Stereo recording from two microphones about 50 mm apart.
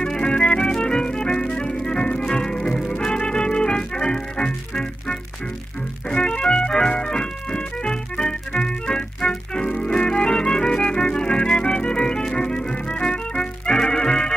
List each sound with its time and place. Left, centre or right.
0.0 s music: centre